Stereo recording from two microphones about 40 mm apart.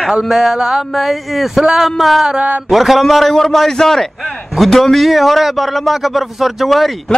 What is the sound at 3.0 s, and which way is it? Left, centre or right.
A man's voice, centre.